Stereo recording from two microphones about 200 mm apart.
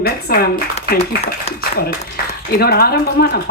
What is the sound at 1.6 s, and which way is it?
A woman's voice, 50° left (ahead or behind).